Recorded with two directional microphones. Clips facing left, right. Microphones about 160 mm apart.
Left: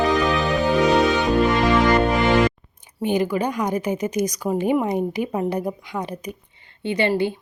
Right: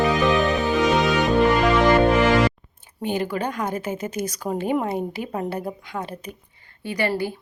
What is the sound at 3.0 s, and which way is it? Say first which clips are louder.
A woman's voice: left 4 dB; 15° left (ahead or behind).